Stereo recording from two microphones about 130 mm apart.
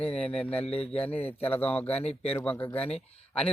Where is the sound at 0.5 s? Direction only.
50° left (ahead or behind).